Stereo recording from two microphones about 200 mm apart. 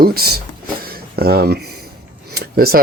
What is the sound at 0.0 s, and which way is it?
Speech, 50° right (ahead or behind).